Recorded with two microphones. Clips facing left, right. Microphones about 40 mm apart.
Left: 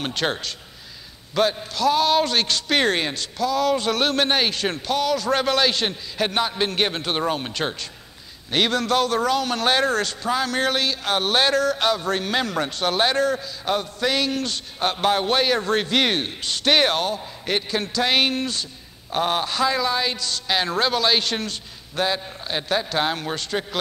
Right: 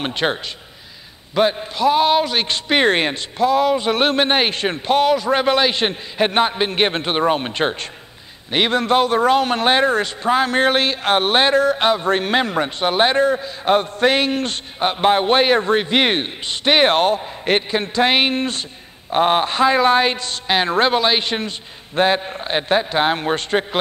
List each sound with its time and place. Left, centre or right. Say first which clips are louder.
0.0 s a man's voice: right 4 dB; right
5.1 s a man's voice: right 4 dB; right
14.8 s a man's voice: right 5 dB; right
16.9 s a man's voice: right 8 dB; right